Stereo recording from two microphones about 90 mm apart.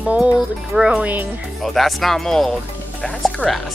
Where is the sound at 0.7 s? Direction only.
10° right (ahead or behind).